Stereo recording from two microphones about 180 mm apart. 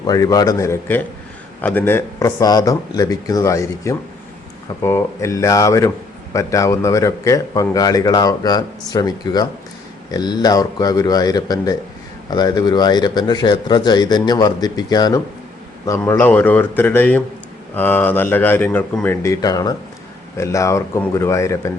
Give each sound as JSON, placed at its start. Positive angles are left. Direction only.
{"t": 0.0, "sound": "a man's voice", "side_deg": 20}